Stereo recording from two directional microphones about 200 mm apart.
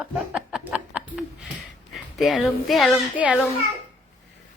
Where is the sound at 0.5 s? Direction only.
5° right (ahead or behind).